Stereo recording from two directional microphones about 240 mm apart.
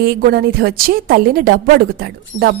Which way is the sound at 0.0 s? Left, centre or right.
Right.